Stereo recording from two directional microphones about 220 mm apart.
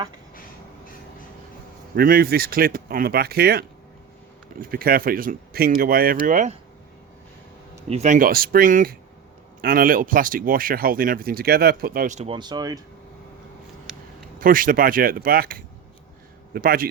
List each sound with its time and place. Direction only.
2.0 s speech: 40° right (ahead or behind)
7.9 s speech: 30° right (ahead or behind)
14.3 s speech: 40° right (ahead or behind)